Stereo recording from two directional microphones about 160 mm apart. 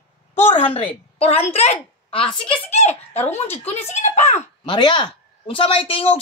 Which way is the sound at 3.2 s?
15° left (ahead or behind).